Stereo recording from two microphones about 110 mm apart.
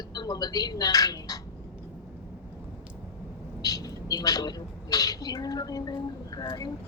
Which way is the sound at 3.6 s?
35° left (ahead or behind).